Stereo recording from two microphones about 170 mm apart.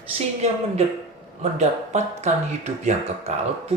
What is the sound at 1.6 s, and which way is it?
Speech, 40° right (ahead or behind).